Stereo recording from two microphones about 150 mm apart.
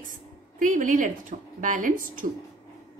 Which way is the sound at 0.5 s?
60° right (ahead or behind).